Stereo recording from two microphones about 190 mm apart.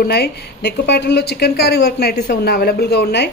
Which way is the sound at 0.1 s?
60° left (ahead or behind).